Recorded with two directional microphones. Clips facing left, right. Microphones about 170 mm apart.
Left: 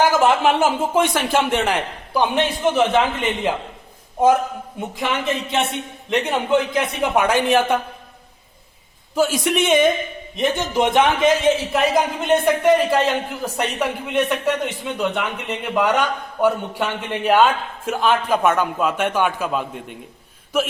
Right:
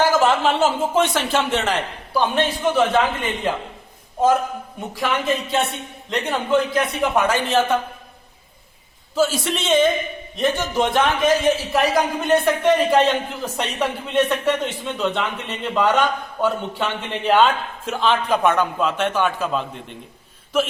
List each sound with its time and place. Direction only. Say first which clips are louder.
0.0 s a man's voice: left 1 dB; 15° left (ahead or behind)
4.9 s a man's voice: right 1 dB; 20° left (ahead or behind)
9.1 s a man's voice: left 2 dB; 15° left (ahead or behind)
12.6 s a man's voice: right 1 dB; 10° left (ahead or behind)